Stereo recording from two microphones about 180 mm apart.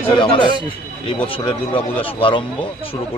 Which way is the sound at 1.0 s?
30° left (ahead or behind).